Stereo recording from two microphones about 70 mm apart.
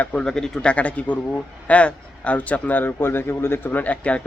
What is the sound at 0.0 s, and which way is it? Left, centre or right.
A man's voice, centre.